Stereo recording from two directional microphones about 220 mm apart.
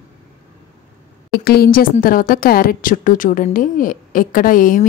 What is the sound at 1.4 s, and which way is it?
A woman's voice, 45° left (ahead or behind).